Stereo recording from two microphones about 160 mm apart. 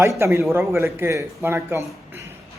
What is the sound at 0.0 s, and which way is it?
Speech, 15° right (ahead or behind).